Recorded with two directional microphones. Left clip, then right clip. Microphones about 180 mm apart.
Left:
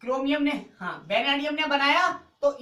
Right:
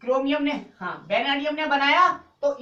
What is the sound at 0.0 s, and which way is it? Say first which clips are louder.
A man's voice: right 3 dB; 30° left (ahead or behind).